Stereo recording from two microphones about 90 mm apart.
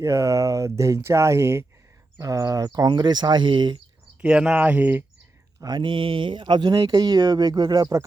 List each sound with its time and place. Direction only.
0.0 s speech: 35° right (ahead or behind); by 3.8 s 65° right (ahead or behind)
4.2 s speech: 10° right (ahead or behind)
5.5 s mantra: 50° right (ahead or behind)
5.8 s speech: 75° right (ahead or behind); by 8.0 s 45° right (ahead or behind)